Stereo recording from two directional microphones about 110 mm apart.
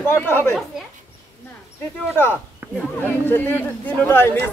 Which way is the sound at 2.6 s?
20° right (ahead or behind).